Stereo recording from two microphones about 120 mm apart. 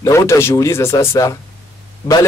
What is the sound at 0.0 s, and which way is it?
A man's voice, 25° left (ahead or behind).